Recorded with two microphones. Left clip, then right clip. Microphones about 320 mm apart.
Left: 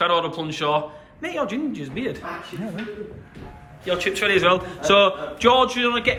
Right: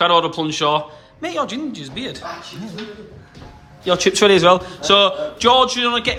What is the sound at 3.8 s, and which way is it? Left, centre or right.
A man's voice, centre.